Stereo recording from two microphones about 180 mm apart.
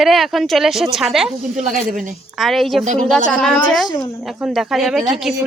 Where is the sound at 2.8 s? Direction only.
40° right (ahead or behind).